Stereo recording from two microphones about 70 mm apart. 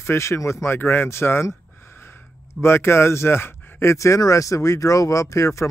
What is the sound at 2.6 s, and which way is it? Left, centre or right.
Speech, left.